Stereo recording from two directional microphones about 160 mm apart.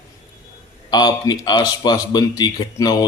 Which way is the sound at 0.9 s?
25° left (ahead or behind).